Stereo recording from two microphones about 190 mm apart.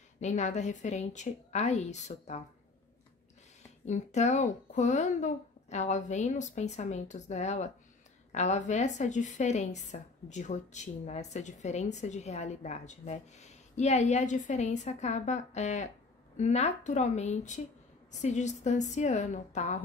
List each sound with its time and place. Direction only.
0.2 s a woman's voice: 40° left (ahead or behind)
3.8 s a woman's voice: 35° left (ahead or behind)